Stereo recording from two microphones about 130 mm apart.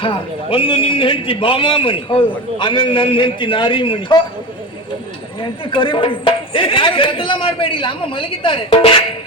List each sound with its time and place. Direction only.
0.0 s a man's voice: 40° left (ahead or behind)
5.4 s speech: 40° left (ahead or behind)